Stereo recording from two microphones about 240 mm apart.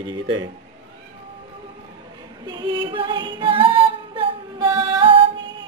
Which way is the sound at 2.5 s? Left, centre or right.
Centre.